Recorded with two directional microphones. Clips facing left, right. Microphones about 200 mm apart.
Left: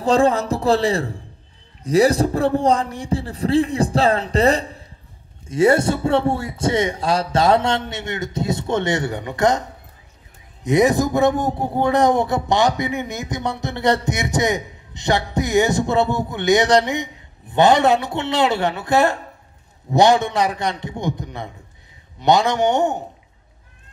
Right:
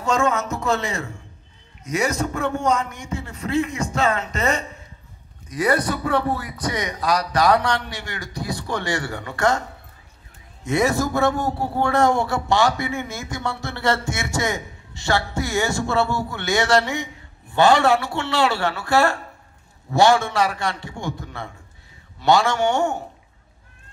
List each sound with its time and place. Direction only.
0.0 s a man's voice: 35° left (ahead or behind)